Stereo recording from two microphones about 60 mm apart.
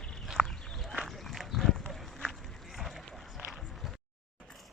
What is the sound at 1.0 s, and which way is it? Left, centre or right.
Run, centre.